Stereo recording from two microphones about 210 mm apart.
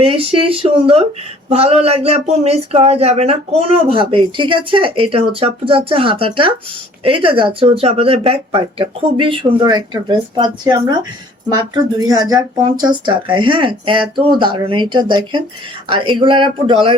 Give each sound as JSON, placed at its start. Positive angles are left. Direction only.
{"t": 0.0, "sound": "speech", "side_deg": -25}